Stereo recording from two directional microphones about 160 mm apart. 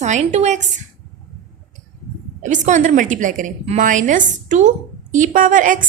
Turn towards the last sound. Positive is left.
turn(degrees=-55)  # may be behind; listen again after turning